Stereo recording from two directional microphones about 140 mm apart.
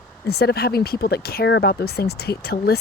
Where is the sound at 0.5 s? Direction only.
90° left.